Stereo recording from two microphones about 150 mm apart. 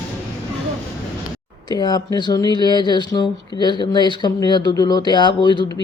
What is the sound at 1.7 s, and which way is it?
Speech, 25° left (ahead or behind).